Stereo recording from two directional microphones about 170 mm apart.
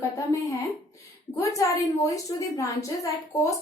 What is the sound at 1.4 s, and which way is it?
A woman's voice, 20° left (ahead or behind).